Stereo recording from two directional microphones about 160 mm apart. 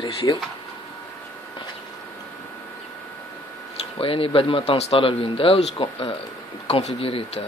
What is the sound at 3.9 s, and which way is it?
Speech, 35° left (ahead or behind).